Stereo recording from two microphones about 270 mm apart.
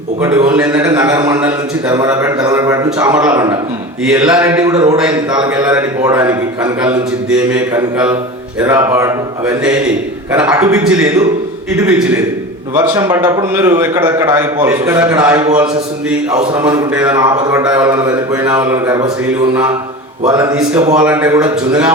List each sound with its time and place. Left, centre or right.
0.2 s a man's voice: centre
12.7 s a man's voice: centre
21.0 s a man's voice: centre